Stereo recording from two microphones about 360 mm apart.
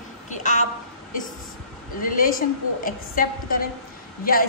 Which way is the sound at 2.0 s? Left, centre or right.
Left.